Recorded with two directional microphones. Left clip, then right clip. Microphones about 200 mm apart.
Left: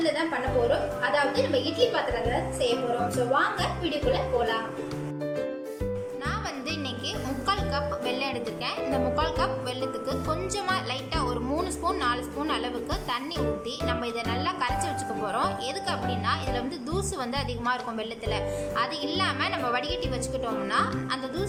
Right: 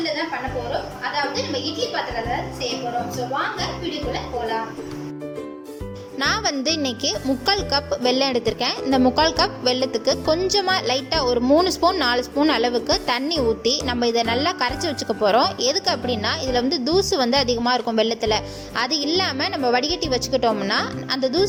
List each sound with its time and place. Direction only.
6.1 s speech: 40° right (ahead or behind)